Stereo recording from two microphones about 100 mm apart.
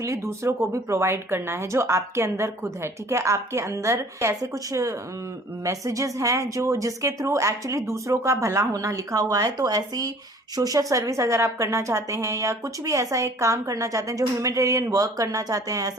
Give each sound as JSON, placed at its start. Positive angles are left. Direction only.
{"t": 0.0, "sound": "a woman's voice", "side_deg": -30}